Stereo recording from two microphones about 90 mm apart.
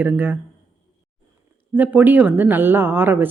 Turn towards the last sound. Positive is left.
turn(degrees=-25)  # may be behind; listen again after turning